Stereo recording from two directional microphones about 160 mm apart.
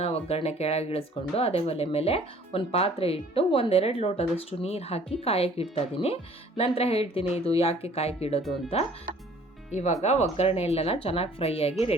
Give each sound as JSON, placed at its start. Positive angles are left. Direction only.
{"t": 0.0, "sound": "speech", "side_deg": 40}